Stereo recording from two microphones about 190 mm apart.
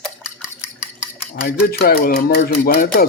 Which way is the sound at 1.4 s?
55° left (ahead or behind).